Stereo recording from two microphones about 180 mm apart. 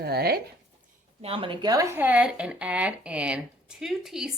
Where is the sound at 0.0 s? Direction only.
60° right (ahead or behind).